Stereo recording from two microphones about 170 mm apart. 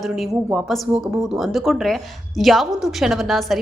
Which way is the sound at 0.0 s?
Centre (ahead or behind).